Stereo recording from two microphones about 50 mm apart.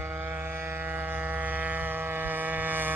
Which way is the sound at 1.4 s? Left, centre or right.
Right.